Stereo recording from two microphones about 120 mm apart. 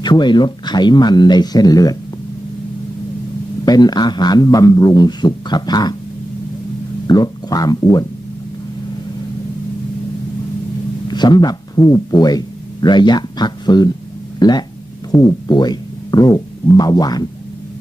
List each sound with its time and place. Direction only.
0.0 s a man's voice: 40° left (ahead or behind)
3.6 s a man's voice: 35° left (ahead or behind)
7.1 s a man's voice: 30° left (ahead or behind)
11.1 s speech: 35° left (ahead or behind)